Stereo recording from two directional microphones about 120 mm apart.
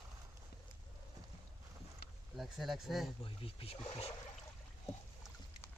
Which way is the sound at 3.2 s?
50° left (ahead or behind).